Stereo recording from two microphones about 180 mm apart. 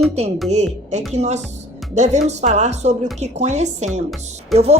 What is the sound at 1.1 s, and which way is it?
Speech, 40° right (ahead or behind).